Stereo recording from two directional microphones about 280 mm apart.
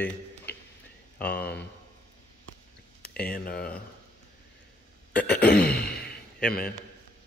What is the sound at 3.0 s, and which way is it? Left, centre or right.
Speech, left.